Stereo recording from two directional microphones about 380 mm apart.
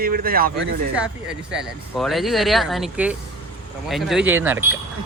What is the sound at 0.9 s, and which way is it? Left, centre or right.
Speech, centre.